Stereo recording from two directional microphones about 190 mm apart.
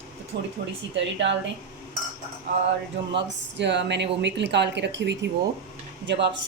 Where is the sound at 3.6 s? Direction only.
65° right (ahead or behind).